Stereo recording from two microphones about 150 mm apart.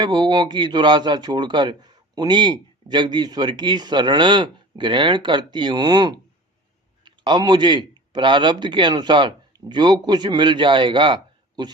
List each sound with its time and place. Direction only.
0.0 s a man's voice: 30° right (ahead or behind)